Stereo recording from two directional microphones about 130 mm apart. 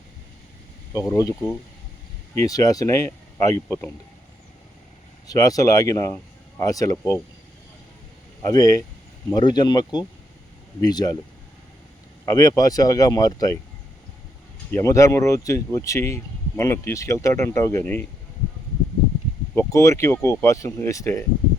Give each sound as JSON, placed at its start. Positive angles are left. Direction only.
{"t": 0.9, "sound": "speech", "side_deg": 25}
{"t": 5.3, "sound": "speech", "side_deg": 25}
{"t": 8.4, "sound": "speech", "side_deg": 25}
{"t": 12.2, "sound": "speech", "side_deg": 25}
{"t": 14.7, "sound": "speech", "side_deg": 25}
{"t": 19.5, "sound": "speech", "side_deg": 25}